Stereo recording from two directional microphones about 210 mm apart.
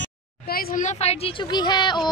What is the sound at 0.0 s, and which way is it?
Speech, 45° left (ahead or behind).